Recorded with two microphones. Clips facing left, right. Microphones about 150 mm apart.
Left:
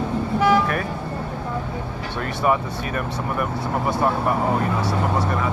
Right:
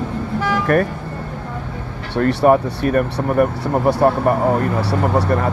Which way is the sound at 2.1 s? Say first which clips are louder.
Right 11 dB; 70° right (ahead or behind).